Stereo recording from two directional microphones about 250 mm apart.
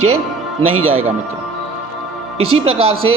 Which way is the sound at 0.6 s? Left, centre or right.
Right.